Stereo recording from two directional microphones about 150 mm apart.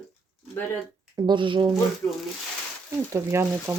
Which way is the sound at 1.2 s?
35° right (ahead or behind).